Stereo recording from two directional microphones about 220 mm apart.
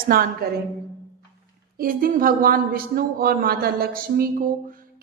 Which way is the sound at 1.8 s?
40° right (ahead or behind).